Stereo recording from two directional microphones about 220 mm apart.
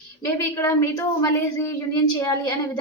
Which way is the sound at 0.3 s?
15° left (ahead or behind).